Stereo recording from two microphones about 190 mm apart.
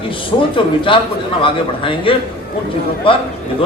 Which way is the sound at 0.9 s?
25° left (ahead or behind).